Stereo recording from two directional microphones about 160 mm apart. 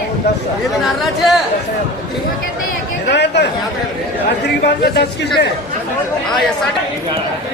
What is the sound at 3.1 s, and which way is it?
A man's voice, 90° left.